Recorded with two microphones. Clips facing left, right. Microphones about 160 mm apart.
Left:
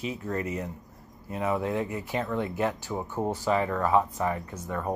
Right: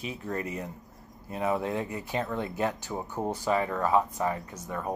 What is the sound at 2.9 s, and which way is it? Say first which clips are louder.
Speech: left 2 dB; 15° right (ahead or behind).